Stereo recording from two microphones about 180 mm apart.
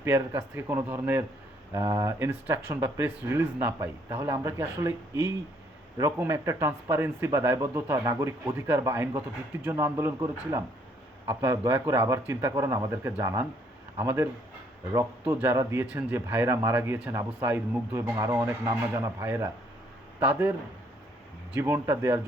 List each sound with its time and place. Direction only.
0.0 s a man's voice: 15° right (ahead or behind)
6.0 s a man's voice: 15° right (ahead or behind)
15.3 s a man's voice: 10° right (ahead or behind)
21.6 s a man's voice: 15° right (ahead or behind)